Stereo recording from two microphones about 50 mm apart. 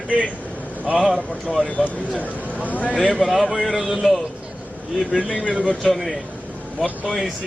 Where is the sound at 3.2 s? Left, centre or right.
Centre.